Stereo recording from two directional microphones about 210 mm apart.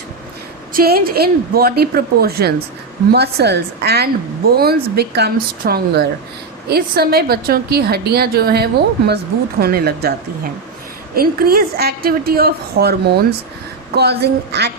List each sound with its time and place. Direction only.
0.7 s a woman's voice: 45° right (ahead or behind)